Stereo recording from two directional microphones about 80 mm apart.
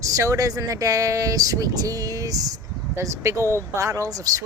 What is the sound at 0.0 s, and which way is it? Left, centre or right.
Speech, right.